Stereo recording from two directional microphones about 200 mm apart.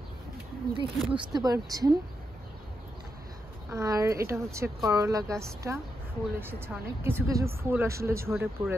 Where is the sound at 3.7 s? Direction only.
15° right (ahead or behind).